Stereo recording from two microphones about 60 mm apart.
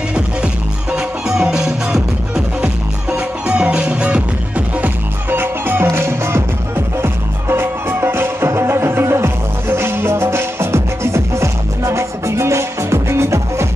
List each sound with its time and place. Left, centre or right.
0.9 s music: centre
5.3 s music: right